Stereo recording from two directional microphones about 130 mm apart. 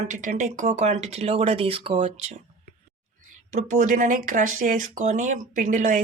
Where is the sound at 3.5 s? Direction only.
70° right (ahead or behind).